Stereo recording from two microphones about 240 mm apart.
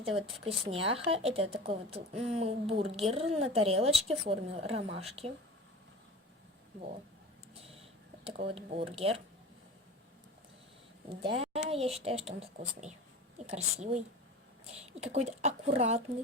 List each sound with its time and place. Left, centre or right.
0.0 s speech: right
7.5 s a sound: right
11.3 s speech: right
15.0 s speech: right